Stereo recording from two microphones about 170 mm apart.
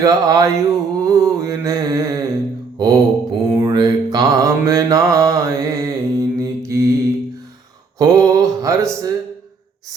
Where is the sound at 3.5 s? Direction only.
20° right (ahead or behind).